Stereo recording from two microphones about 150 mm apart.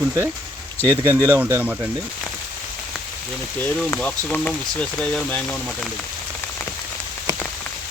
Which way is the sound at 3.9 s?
10° left (ahead or behind).